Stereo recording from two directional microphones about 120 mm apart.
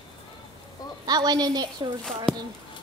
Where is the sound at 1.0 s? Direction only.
35° right (ahead or behind).